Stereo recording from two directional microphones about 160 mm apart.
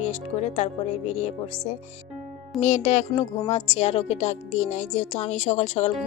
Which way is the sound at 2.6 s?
45° left (ahead or behind).